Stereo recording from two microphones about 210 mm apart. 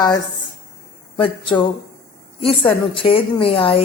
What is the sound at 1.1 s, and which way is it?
A woman's voice, 25° left (ahead or behind).